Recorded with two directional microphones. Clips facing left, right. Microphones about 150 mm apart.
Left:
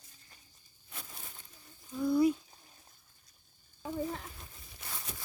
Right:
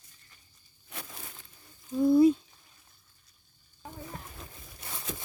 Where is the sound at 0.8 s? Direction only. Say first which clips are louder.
Right 5 dB; 80° right.